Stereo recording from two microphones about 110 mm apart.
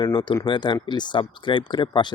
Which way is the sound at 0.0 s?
50° left (ahead or behind).